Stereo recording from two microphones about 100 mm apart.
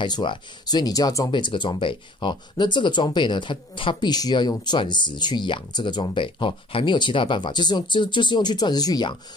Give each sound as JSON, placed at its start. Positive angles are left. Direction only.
{"t": 0.0, "sound": "speech", "side_deg": 50}
{"t": 1.3, "sound": "speech", "side_deg": 55}